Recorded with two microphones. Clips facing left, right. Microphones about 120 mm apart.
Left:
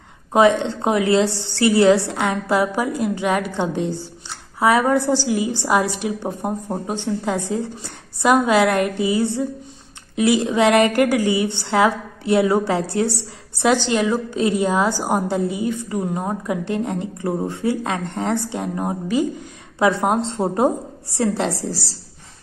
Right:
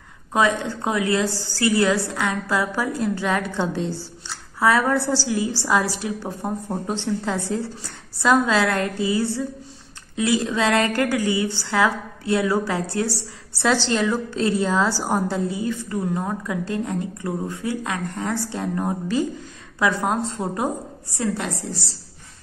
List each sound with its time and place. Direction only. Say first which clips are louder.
0.3 s a woman's voice: left 6 dB; 20° left (ahead or behind)